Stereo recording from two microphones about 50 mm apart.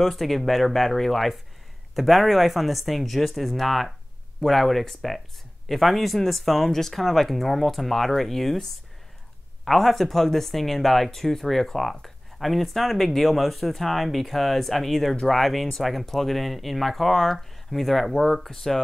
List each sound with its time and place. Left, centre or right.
0.0 s speech: centre
9.7 s speech: centre